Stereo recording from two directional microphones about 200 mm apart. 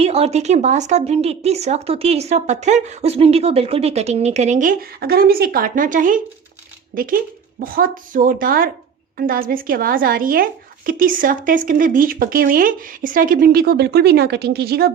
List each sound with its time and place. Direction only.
0.0 s a woman's voice: 30° right (ahead or behind); by 14.9 s 50° right (ahead or behind)